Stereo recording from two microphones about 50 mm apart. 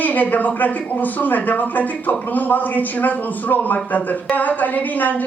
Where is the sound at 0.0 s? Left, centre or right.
Left.